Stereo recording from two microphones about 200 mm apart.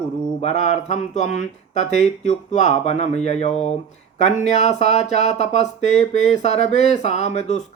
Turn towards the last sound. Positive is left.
turn(degrees=35)  # may be behind; listen again after turning